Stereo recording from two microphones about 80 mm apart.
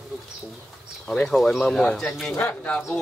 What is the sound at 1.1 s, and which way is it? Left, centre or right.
Speech, centre.